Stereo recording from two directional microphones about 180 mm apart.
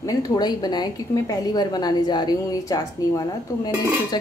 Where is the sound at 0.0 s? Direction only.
20° left (ahead or behind).